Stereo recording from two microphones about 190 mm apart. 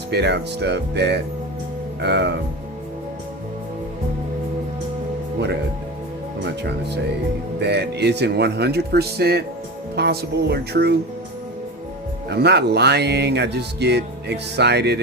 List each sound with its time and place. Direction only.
0.1 s speech: 60° right (ahead or behind)
6.4 s speech: 65° right (ahead or behind)
12.3 s speech: 60° right (ahead or behind)